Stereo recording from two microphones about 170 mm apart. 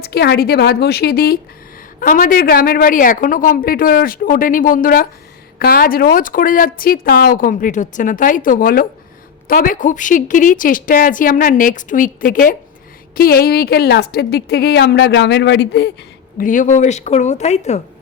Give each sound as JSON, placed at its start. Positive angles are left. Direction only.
{"t": 0.0, "sound": "a woman's voice", "side_deg": 70}
{"t": 16.4, "sound": "a woman's voice", "side_deg": 50}